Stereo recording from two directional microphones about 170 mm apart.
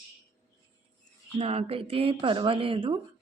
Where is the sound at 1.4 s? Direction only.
35° right (ahead or behind).